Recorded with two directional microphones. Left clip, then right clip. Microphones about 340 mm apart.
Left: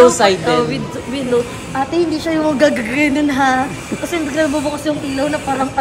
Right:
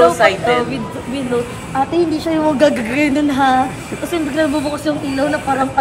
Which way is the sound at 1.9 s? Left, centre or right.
Centre.